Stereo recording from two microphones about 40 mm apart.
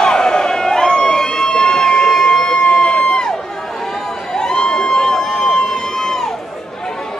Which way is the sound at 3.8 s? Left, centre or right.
Centre.